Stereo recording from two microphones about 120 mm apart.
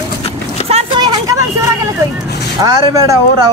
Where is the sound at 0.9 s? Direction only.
40° right (ahead or behind).